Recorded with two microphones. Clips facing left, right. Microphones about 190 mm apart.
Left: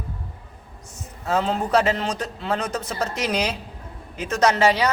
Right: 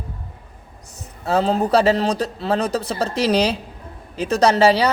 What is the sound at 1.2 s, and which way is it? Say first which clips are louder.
A man's voice: right 4 dB; 35° right (ahead or behind).